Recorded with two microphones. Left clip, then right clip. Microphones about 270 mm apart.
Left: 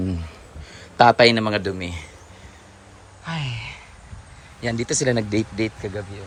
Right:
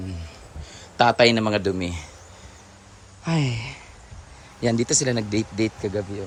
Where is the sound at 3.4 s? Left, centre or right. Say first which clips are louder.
Right 2 dB; right.